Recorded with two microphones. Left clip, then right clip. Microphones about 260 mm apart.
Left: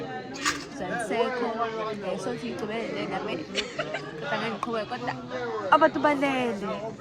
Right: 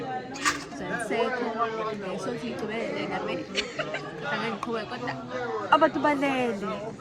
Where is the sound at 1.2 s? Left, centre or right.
Left.